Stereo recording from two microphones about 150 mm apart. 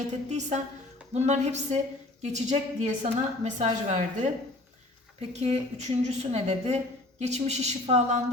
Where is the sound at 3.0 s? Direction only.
50° right (ahead or behind).